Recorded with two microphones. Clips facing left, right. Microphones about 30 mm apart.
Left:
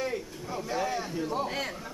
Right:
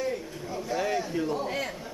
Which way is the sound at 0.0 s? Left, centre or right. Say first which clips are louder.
Right 1 dB; centre.